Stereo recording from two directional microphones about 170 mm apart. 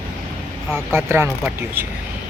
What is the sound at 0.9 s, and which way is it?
Speech, 15° right (ahead or behind).